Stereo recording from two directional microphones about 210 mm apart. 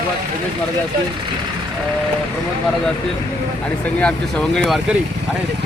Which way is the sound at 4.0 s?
5° left (ahead or behind).